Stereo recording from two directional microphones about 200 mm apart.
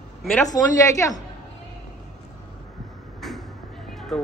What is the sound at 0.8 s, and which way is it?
Speech, 15° left (ahead or behind).